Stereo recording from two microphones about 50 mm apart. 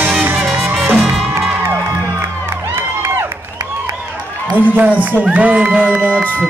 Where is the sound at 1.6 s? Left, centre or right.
Right.